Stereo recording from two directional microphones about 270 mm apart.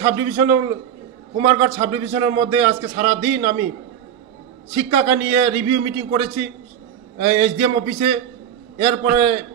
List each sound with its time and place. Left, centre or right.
0.0 s a man's voice: centre
4.7 s a man's voice: centre